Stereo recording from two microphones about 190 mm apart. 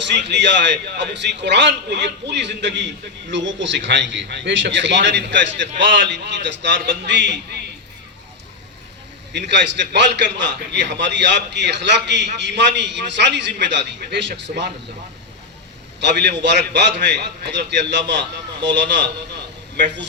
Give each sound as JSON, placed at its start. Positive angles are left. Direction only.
{"t": 0.0, "sound": "a man's voice", "side_deg": -65}
{"t": 9.5, "sound": "a man's voice", "side_deg": -65}
{"t": 16.0, "sound": "a man's voice", "side_deg": -65}